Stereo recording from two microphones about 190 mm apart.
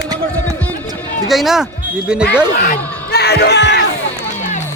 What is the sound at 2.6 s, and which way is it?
Music, 50° left (ahead or behind).